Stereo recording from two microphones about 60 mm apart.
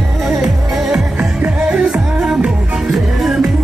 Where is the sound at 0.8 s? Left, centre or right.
Centre.